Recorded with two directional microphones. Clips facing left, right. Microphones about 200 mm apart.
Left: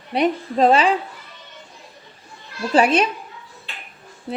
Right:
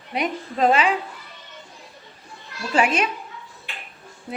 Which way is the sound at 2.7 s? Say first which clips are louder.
Left 4 dB; 35° left (ahead or behind).